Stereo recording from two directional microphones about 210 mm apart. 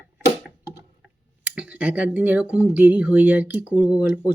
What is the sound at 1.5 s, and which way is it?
Speech, 5° right (ahead or behind).